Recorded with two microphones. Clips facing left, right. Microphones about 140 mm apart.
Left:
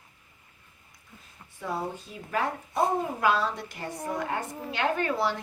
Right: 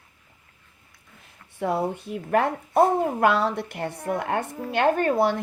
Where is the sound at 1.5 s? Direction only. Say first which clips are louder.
Right 7 dB; 65° right (ahead or behind).